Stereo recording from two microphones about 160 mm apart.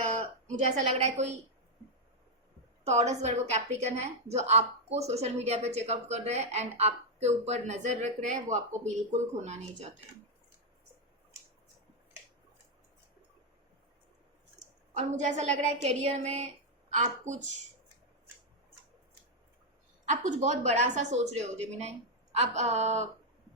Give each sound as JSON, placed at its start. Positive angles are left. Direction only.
{"t": 0.6, "sound": "a woman's voice", "side_deg": -45}
{"t": 2.8, "sound": "a woman's voice", "side_deg": -45}
{"t": 14.9, "sound": "a woman's voice", "side_deg": -45}
{"t": 20.1, "sound": "a woman's voice", "side_deg": -50}